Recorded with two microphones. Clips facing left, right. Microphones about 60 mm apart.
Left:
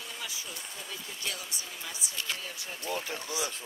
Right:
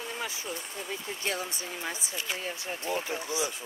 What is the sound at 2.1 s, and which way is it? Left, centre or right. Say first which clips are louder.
Speech: left 2 dB; centre.